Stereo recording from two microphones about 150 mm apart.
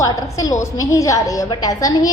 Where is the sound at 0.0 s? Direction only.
20° left (ahead or behind).